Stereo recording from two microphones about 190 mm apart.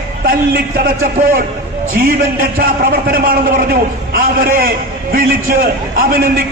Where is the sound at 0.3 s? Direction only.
50° right (ahead or behind).